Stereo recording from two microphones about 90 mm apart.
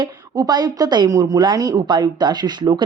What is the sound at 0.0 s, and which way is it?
A woman's voice, 50° right (ahead or behind).